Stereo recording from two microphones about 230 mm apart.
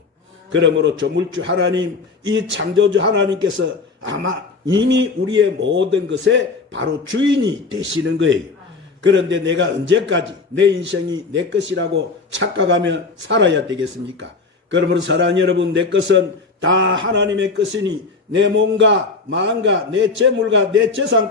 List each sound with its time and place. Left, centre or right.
0.5 s a man's voice: right
14.7 s a man's voice: right